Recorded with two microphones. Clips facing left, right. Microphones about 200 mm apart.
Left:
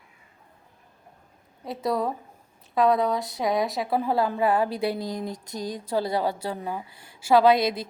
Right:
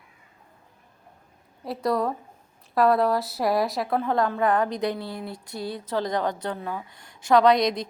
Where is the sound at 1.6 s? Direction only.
Centre (ahead or behind).